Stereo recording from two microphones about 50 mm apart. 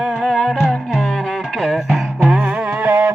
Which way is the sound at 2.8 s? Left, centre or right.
Right.